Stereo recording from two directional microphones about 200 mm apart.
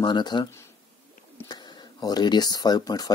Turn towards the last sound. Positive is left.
turn(degrees=20)  # may be behind; listen again after turning